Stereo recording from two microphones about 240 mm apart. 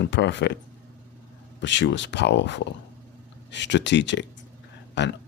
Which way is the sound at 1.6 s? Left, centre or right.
Left.